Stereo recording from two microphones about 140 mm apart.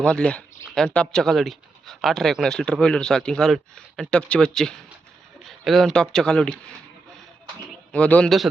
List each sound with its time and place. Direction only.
0.0 s speech: 5° left (ahead or behind)
7.9 s a man's voice: 10° left (ahead or behind)